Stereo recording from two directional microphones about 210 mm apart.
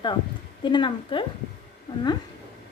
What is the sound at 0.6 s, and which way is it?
Speech, 20° left (ahead or behind).